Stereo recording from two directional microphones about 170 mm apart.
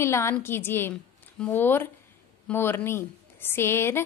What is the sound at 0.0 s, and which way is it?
A woman's voice, 15° left (ahead or behind).